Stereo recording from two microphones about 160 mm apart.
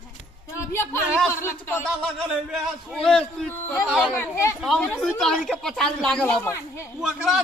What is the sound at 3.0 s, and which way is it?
Speech, 5° left (ahead or behind).